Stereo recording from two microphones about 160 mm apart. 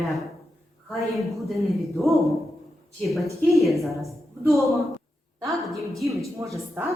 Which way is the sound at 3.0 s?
Centre (ahead or behind).